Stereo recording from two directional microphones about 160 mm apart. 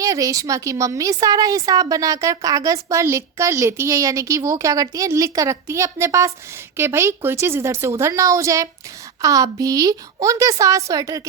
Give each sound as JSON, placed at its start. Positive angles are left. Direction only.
{"t": 0.0, "sound": "a woman's voice", "side_deg": -20}